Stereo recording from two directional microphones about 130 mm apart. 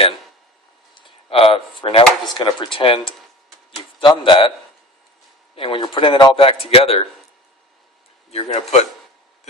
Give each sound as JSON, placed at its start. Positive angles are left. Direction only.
{"t": 1.3, "sound": "speech", "side_deg": 45}
{"t": 5.5, "sound": "speech", "side_deg": 40}
{"t": 8.3, "sound": "speech", "side_deg": 55}